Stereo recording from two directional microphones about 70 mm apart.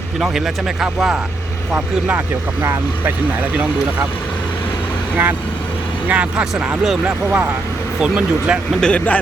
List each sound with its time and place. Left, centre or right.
0.2 s speech: centre
2.0 s speech: right
6.1 s speech: centre
7.0 s speech: centre
8.8 s speech: centre